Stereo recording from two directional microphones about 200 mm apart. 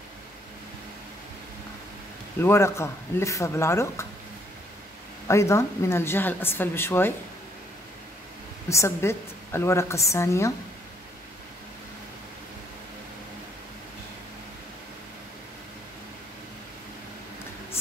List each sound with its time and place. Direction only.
2.4 s a woman's voice: 15° left (ahead or behind)
5.3 s a woman's voice: 15° left (ahead or behind)
8.6 s a woman's voice: 15° left (ahead or behind)